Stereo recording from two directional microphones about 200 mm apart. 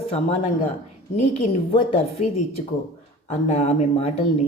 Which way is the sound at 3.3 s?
35° left (ahead or behind).